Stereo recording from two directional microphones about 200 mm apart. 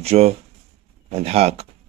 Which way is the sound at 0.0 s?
30° right (ahead or behind).